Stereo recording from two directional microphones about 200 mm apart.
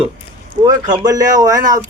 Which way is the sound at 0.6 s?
20° right (ahead or behind).